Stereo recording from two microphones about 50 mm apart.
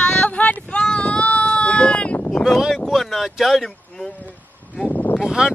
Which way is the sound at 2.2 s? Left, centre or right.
Left.